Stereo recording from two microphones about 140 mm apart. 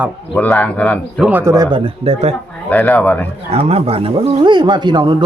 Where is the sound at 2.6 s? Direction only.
10° left (ahead or behind).